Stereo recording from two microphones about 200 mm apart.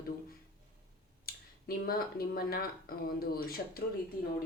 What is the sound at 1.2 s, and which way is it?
Speech, 50° left (ahead or behind).